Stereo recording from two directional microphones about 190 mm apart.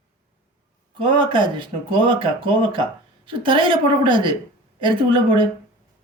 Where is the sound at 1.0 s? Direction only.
25° right (ahead or behind).